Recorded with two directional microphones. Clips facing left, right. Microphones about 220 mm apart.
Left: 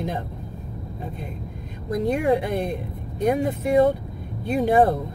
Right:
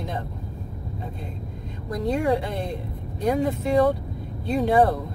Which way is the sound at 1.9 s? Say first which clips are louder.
Left 2 dB; 20° left (ahead or behind).